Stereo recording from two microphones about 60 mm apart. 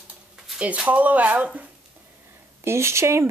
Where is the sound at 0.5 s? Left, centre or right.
Right.